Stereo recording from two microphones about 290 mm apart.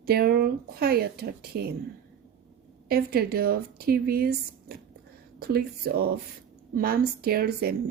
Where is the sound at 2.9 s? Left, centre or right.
Right.